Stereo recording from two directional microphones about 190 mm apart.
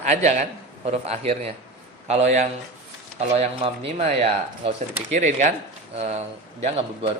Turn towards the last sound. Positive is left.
turn(degrees=-35)  # may be behind; listen again after turning